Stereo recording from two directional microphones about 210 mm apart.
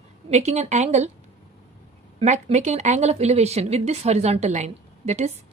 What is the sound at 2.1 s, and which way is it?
A woman's voice, 30° right (ahead or behind).